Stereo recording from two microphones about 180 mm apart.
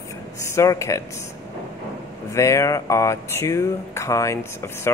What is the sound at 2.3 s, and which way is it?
Speech, 15° left (ahead or behind).